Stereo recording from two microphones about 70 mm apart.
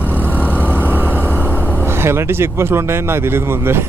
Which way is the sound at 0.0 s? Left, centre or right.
Right.